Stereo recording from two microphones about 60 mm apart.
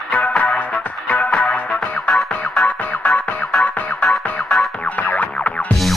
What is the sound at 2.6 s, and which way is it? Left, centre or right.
Music, left.